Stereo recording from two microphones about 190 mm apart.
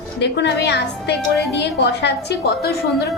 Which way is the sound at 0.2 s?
65° left (ahead or behind).